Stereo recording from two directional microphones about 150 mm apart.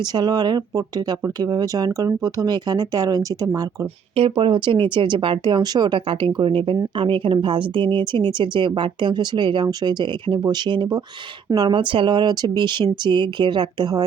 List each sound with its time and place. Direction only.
0.0 s speech: 30° right (ahead or behind)